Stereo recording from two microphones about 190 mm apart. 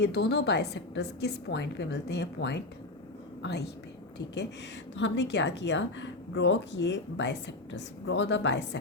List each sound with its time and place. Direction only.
0.0 s a woman's voice: 60° left (ahead or behind)
4.9 s a woman's voice: 75° left (ahead or behind)